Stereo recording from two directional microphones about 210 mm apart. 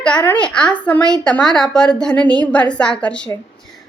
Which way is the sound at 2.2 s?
20° right (ahead or behind).